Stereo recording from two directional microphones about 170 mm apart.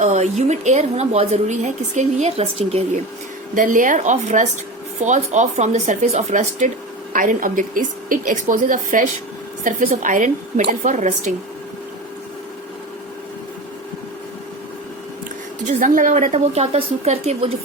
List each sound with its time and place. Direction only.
0.0 s a woman's voice: 45° right (ahead or behind)
3.5 s a woman's voice: 50° right (ahead or behind)
15.6 s a woman's voice: 50° right (ahead or behind)